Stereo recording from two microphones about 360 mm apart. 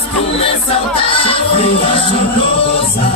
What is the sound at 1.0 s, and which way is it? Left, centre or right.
Music, centre.